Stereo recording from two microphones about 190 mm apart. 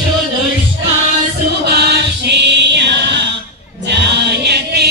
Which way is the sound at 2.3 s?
65° right (ahead or behind).